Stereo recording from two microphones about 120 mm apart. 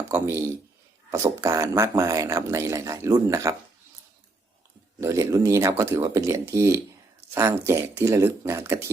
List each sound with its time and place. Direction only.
0.1 s speech: 20° right (ahead or behind)
4.9 s speech: 25° right (ahead or behind)